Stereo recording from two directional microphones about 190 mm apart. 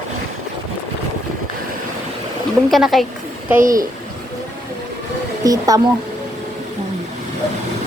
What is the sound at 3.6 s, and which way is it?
Speech, 45° right (ahead or behind).